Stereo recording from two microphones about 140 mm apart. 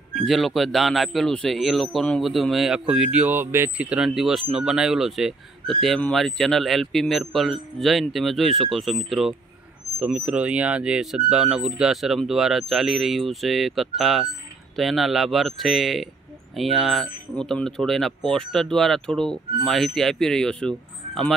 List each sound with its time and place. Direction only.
0.1 s speech: centre (ahead or behind)